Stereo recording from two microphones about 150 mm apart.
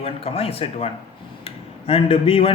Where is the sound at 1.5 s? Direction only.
40° left (ahead or behind).